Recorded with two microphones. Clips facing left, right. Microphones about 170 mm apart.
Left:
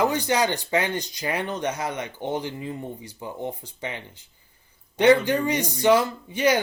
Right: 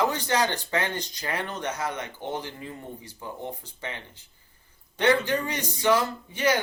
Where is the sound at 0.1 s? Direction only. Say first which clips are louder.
Left 3 dB; 15° left (ahead or behind).